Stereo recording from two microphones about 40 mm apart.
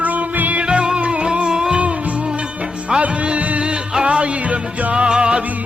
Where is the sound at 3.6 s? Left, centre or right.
Right.